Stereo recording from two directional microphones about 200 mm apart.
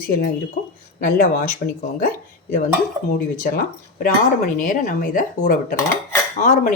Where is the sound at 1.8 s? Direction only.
45° left (ahead or behind).